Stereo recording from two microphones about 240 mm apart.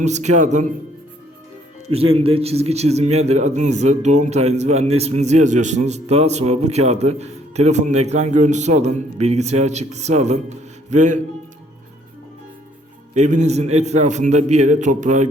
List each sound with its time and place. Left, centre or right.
0.0 s a man's voice: right
1.9 s a man's voice: right
13.1 s a man's voice: right